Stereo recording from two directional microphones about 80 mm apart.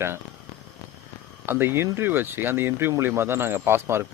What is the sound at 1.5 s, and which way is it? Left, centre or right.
Speech, right.